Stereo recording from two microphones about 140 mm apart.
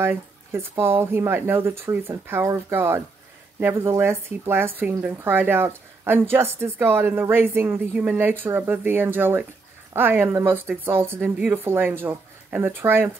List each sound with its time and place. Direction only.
0.0 s speech: 15° right (ahead or behind)